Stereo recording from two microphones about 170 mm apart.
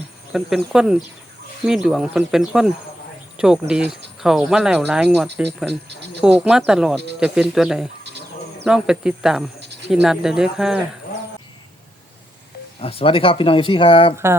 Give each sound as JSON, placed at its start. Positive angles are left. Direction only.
{"t": 0.3, "sound": "speech", "side_deg": -5}
{"t": 9.6, "sound": "cricket", "side_deg": -85}
{"t": 9.9, "sound": "speech", "side_deg": -5}
{"t": 12.8, "sound": "speech", "side_deg": 35}